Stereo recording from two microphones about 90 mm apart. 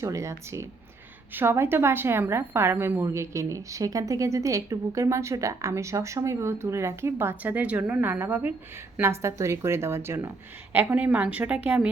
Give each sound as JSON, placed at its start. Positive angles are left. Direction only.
{"t": 0.0, "sound": "a woman's voice", "side_deg": -35}
{"t": 9.0, "sound": "speech", "side_deg": -30}
{"t": 10.7, "sound": "a woman's voice", "side_deg": -20}